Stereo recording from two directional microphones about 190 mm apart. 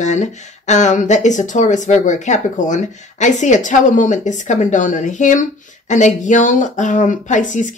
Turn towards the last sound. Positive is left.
turn(degrees=40)  # may be behind; listen again after turning